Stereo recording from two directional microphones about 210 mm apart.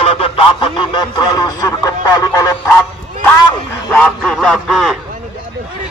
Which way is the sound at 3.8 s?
5° left (ahead or behind).